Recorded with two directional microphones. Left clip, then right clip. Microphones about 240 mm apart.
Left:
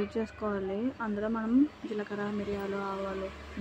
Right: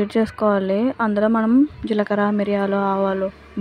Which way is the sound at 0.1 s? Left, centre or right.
Right.